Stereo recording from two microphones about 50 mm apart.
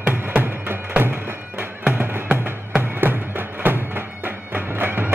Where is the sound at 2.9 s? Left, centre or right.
Right.